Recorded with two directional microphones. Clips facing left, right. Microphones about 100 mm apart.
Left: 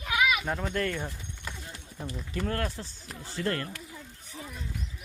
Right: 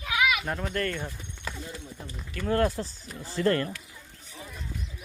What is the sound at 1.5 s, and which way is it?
Clip-clop, 90° right.